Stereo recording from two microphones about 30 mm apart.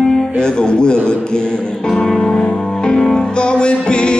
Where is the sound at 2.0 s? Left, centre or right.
Left.